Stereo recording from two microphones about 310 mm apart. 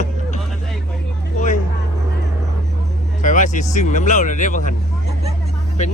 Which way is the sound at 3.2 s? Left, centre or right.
Left.